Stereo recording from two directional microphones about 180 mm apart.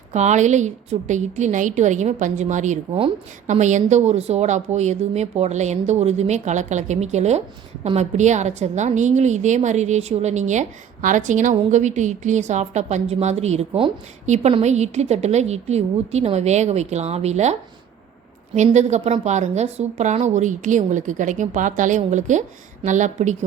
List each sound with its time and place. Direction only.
0.1 s a woman's voice: 40° right (ahead or behind)